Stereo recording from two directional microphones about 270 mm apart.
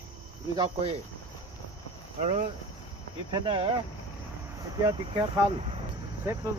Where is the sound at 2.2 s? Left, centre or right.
Right.